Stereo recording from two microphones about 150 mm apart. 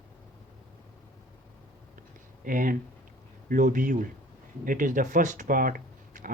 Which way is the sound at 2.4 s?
65° right (ahead or behind).